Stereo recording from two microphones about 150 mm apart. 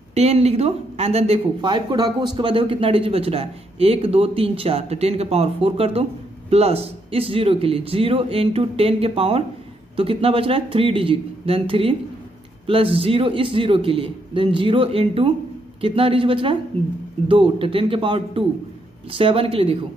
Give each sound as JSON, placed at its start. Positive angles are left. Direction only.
{"t": 0.1, "sound": "speech", "side_deg": -45}